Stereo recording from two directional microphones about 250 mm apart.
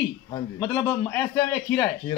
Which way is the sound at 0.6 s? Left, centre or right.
Centre.